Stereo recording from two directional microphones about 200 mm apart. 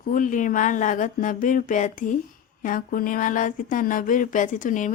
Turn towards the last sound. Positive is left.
turn(degrees=40)  # may be behind; listen again after turning